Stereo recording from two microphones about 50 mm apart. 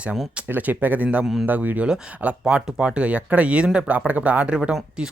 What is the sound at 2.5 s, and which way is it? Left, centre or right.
Speech, centre.